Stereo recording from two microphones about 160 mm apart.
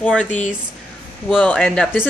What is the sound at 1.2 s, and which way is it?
Speech, 10° left (ahead or behind).